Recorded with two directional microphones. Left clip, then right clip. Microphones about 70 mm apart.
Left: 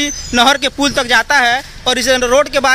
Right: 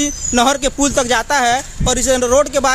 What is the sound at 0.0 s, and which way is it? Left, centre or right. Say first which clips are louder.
Speech: left 3 dB; right.